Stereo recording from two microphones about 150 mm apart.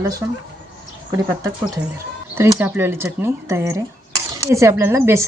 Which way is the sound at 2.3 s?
15° right (ahead or behind).